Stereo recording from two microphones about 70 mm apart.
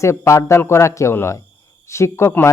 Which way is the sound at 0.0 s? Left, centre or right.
Left.